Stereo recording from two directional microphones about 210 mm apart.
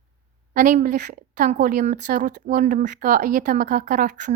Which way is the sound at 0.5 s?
40° right (ahead or behind).